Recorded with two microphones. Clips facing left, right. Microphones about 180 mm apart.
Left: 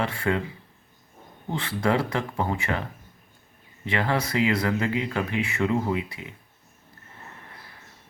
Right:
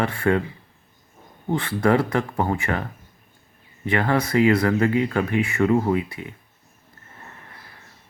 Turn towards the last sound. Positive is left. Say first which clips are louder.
# right 5 dB
turn(degrees=-50)  # may be behind; listen again after turning